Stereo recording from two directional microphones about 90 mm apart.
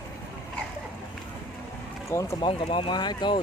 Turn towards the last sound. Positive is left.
turn(degrees=55)  # may be behind; listen again after turning